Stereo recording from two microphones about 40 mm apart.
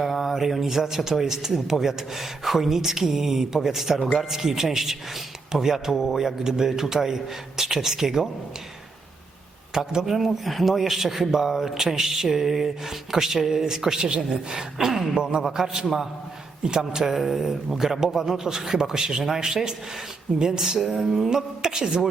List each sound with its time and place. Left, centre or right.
0.0 s a man's voice: centre
9.7 s a man's voice: centre
10.2 s a man's voice: centre
15.1 s a man's voice: centre
17.0 s a man's voice: centre